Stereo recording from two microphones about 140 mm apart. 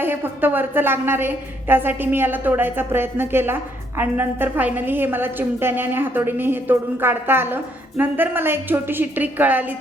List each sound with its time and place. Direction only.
0.0 s a woman's voice: 15° right (ahead or behind)